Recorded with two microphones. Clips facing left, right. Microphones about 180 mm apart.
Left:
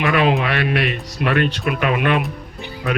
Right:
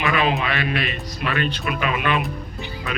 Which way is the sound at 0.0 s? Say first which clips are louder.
Left 4 dB; 65° left (ahead or behind).